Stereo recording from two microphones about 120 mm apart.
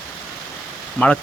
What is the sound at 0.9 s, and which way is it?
Speech, 10° left (ahead or behind).